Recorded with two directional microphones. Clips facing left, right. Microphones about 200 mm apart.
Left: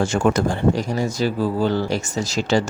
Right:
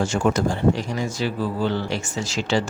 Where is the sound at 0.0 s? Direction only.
55° left (ahead or behind).